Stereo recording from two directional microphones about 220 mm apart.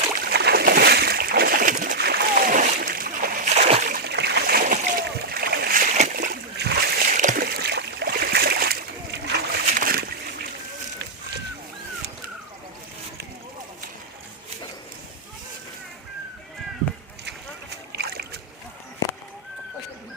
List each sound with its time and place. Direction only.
0.2 s boat: 45° right (ahead or behind)
5.0 s splash: 45° right (ahead or behind)
17.2 s boat: 50° right (ahead or behind)